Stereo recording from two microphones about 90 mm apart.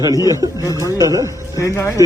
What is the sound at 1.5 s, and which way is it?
Speech, 35° left (ahead or behind).